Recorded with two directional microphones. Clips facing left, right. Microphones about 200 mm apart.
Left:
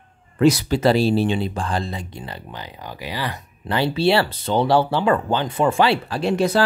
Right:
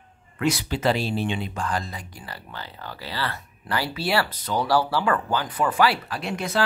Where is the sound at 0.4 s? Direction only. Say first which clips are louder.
Left 8 dB; 40° left (ahead or behind).